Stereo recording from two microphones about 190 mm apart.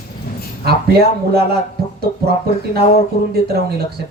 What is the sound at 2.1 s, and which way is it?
Speech, 45° left (ahead or behind).